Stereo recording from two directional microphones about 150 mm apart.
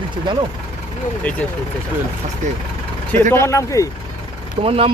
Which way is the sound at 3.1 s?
15° left (ahead or behind).